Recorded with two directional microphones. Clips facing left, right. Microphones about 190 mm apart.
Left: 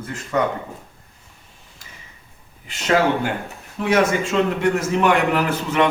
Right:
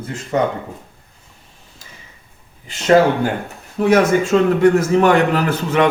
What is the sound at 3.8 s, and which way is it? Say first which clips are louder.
A man's voice: right 5 dB; 40° right (ahead or behind).